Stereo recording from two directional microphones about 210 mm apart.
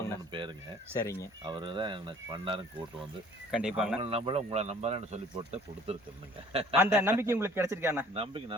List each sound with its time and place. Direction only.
0.9 s speech: 15° left (ahead or behind)
1.5 s speech: 20° right (ahead or behind)
3.5 s speech: 5° right (ahead or behind)
4.0 s speech: 25° right (ahead or behind)
6.7 s a man's voice: 10° right (ahead or behind)
8.1 s speech: 25° right (ahead or behind)